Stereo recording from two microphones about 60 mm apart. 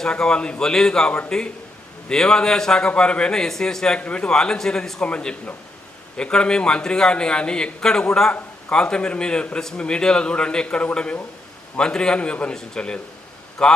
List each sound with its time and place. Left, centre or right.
0.0 s a man's voice: centre